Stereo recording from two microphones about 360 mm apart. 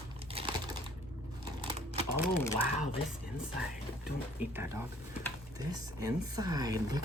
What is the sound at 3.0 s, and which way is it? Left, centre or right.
Speech, centre.